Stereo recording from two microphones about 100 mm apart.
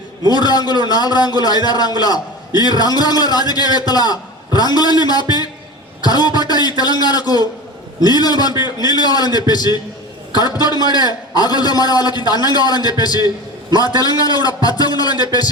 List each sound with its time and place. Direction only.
0.3 s a man's voice: 45° left (ahead or behind)